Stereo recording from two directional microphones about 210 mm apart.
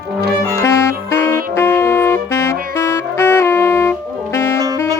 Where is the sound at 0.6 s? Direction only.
10° left (ahead or behind).